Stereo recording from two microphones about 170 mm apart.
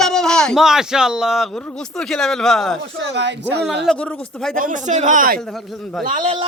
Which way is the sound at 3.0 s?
90° right.